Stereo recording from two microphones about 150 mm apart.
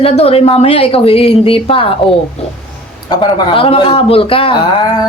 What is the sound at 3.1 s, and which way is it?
A man's voice, 35° left (ahead or behind).